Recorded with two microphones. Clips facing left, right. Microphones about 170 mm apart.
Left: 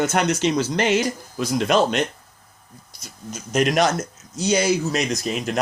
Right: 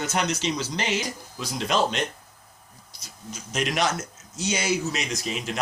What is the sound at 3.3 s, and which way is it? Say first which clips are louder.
Speech: left 8 dB; 45° left (ahead or behind).